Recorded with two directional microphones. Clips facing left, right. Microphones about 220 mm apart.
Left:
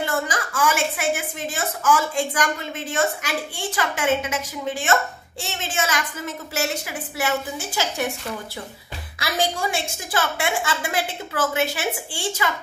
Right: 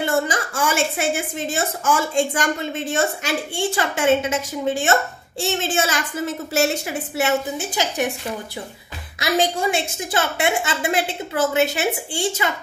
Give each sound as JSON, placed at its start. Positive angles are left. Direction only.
{"t": 0.0, "sound": "a woman's voice", "side_deg": -25}